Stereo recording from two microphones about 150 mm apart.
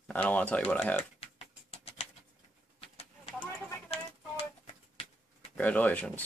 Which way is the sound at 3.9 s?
40° left (ahead or behind).